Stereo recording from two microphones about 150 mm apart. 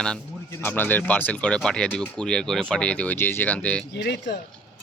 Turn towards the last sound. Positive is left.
turn(degrees=90)